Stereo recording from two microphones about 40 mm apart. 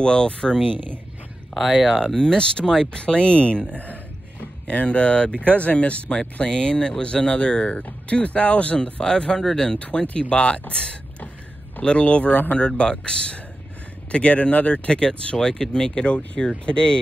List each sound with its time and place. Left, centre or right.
0.0 s speech: left
0.7 s speech: right
1.5 s speech: centre
2.1 s speech: centre
9.0 s speech: left
9.8 s speech: left
10.7 s a sound: left
11.8 s speech: left
12.6 s speech: left
15.0 s speech: centre